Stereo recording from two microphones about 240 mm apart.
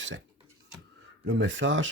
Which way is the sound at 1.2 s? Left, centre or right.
Right.